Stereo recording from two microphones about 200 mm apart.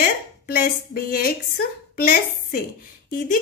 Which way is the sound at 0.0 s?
50° left (ahead or behind).